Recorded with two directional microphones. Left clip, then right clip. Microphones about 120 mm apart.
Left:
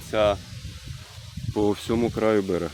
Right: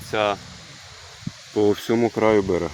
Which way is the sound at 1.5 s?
Centre (ahead or behind).